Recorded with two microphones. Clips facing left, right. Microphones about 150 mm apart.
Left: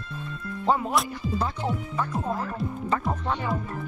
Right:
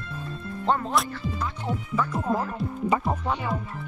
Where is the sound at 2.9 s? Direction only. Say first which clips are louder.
Right 2 dB; 15° right (ahead or behind).